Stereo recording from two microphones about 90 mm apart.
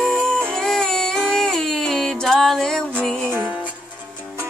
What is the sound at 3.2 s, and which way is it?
Music, 20° right (ahead or behind).